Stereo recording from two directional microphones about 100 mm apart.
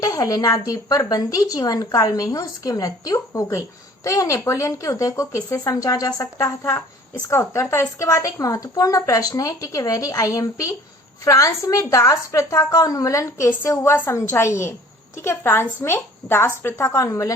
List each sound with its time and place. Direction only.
0.0 s a woman's voice: 35° left (ahead or behind)
7.3 s a woman's voice: 25° left (ahead or behind)